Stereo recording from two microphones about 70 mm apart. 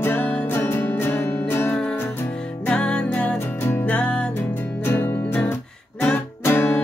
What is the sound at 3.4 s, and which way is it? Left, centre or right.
Music, left.